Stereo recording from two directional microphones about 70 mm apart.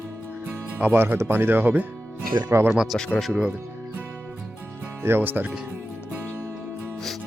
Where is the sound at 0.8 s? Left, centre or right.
Right.